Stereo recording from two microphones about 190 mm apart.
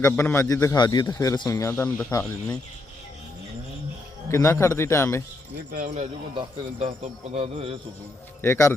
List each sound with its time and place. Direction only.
0.0 s a man's voice: 15° left (ahead or behind)
4.3 s a man's voice: 15° left (ahead or behind)
5.7 s speech: 40° right (ahead or behind)
8.4 s a man's voice: 15° left (ahead or behind)